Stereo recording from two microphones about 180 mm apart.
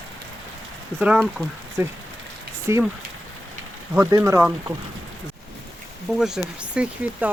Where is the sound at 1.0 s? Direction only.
5° right (ahead or behind).